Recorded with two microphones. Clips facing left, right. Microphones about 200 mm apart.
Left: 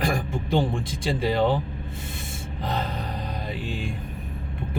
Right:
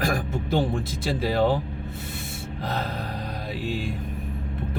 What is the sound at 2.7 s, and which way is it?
Mantra, centre (ahead or behind).